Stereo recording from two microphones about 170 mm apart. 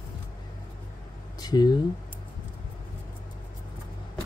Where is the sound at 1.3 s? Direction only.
25° left (ahead or behind).